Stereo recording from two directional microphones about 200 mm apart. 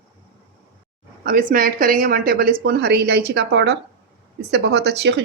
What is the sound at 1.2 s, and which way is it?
Speech, 45° right (ahead or behind).